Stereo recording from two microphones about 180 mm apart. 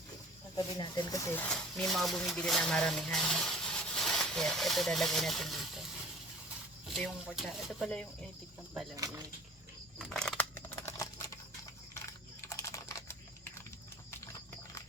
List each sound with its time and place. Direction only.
0.5 s speech: 25° left (ahead or behind); by 5.8 s centre (ahead or behind)
6.9 s speech: centre (ahead or behind)
9.0 s speech: 20° right (ahead or behind)
10.1 s a sound: 5° left (ahead or behind)
11.9 s typing: 15° left (ahead or behind)